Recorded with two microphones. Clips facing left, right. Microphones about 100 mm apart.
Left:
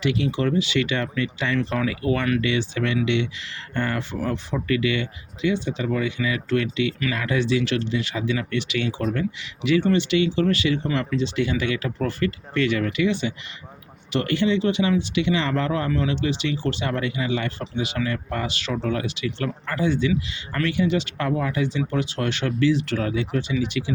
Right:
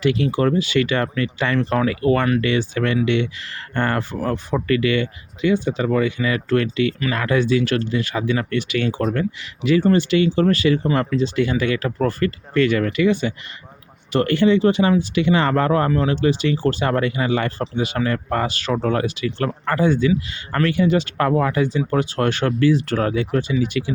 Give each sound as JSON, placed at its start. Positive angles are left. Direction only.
{"t": 0.0, "sound": "speech", "side_deg": -45}